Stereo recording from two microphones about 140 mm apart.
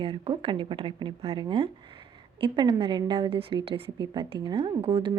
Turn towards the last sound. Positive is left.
turn(degrees=-40)  # may be behind; listen again after turning